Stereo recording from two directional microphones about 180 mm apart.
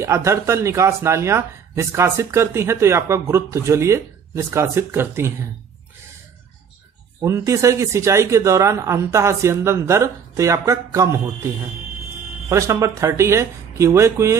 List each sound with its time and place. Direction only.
0.0 s speech: 15° right (ahead or behind)
7.2 s speech: 15° right (ahead or behind)